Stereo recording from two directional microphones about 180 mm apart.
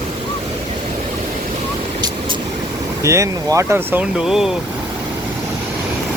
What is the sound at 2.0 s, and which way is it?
Vehicle, 25° right (ahead or behind).